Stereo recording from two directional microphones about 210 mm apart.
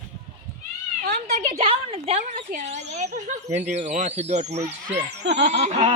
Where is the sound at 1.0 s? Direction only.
40° right (ahead or behind).